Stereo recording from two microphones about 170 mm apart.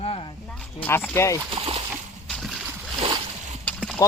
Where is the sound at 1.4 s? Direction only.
35° right (ahead or behind).